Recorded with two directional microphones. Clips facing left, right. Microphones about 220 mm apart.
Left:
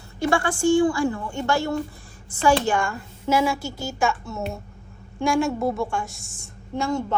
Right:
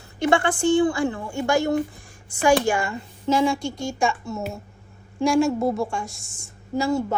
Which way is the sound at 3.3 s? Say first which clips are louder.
Right 1 dB; 5° left (ahead or behind).